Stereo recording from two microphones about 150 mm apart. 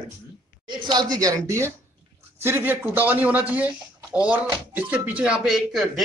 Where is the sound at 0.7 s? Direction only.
30° right (ahead or behind).